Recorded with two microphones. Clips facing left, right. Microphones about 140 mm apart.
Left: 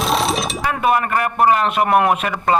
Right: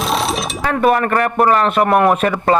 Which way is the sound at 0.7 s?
45° right (ahead or behind).